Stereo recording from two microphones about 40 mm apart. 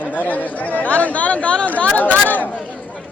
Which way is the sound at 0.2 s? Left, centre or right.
Left.